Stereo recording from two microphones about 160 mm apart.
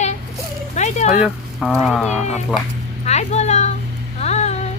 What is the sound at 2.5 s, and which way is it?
Speech, 5° right (ahead or behind).